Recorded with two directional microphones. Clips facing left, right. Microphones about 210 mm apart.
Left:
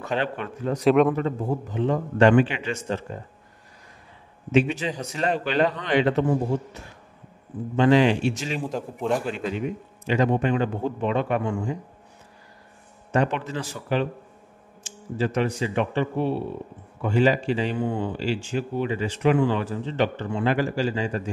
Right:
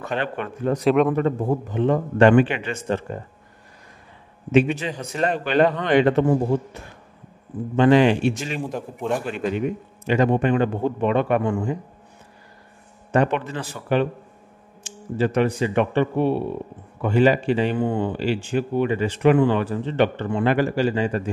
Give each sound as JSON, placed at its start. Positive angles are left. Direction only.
{"t": 0.0, "sound": "a man's voice", "side_deg": -55}
{"t": 0.8, "sound": "a man's voice", "side_deg": 0}
{"t": 1.1, "sound": "a man's voice", "side_deg": -55}
{"t": 4.5, "sound": "a man's voice", "side_deg": -55}
{"t": 7.7, "sound": "a man's voice", "side_deg": -55}
{"t": 8.5, "sound": "a man's voice", "side_deg": 0}
{"t": 9.3, "sound": "a man's voice", "side_deg": -55}
{"t": 13.1, "sound": "a man's voice", "side_deg": -55}